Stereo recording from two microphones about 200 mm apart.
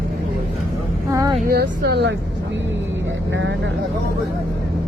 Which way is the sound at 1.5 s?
50° right (ahead or behind).